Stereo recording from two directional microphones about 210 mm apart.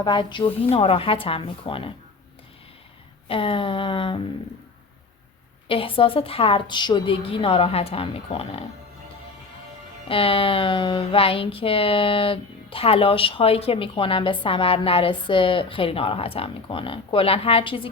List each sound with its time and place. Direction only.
0.0 s speech: 20° left (ahead or behind)
3.2 s speech: 25° left (ahead or behind)
5.6 s speech: 25° left (ahead or behind)
10.1 s speech: 25° left (ahead or behind)